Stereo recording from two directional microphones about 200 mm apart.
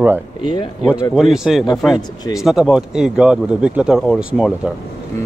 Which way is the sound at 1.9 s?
20° left (ahead or behind).